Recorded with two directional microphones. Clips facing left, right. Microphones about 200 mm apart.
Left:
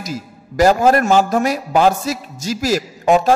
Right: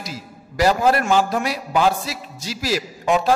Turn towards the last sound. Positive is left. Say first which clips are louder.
# left 5 dB
turn(degrees=45)  # may be behind; listen again after turning